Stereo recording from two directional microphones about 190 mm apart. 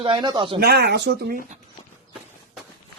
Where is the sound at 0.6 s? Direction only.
55° right (ahead or behind).